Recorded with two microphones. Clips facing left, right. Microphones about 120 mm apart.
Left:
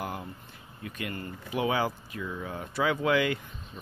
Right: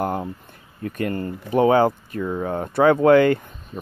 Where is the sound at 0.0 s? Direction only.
50° right (ahead or behind).